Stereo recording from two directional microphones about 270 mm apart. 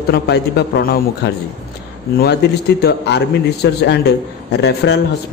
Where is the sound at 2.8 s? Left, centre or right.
Left.